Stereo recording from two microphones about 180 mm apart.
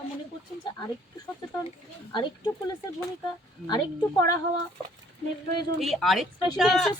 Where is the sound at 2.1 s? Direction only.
25° left (ahead or behind).